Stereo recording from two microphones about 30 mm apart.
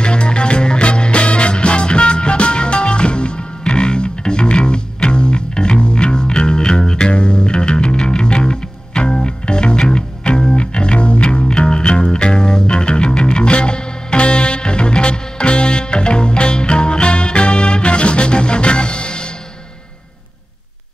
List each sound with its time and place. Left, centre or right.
0.0 s music: left